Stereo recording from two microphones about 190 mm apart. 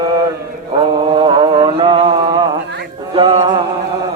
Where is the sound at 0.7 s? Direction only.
25° right (ahead or behind).